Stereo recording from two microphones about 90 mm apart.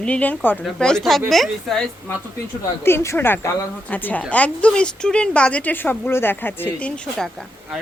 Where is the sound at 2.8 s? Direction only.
30° left (ahead or behind).